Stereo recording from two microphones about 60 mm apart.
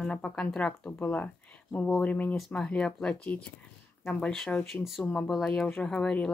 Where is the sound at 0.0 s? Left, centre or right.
Centre.